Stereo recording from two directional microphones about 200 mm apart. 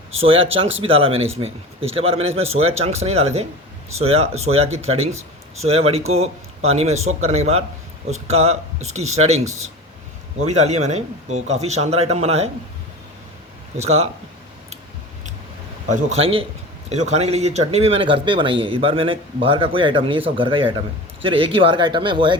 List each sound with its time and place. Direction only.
0.2 s speech: 30° right (ahead or behind)
10.5 s speech: 35° right (ahead or behind)
13.7 s speech: 30° right (ahead or behind)
15.9 s speech: 35° right (ahead or behind)